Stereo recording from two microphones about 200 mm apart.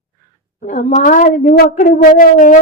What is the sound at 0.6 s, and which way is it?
A woman's voice, 35° left (ahead or behind).